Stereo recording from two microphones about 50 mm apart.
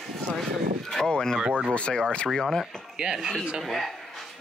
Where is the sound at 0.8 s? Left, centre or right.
Centre.